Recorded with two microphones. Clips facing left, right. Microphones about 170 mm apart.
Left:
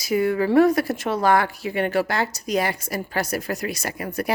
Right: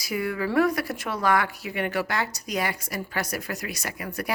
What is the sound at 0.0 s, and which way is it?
Speech, 25° left (ahead or behind).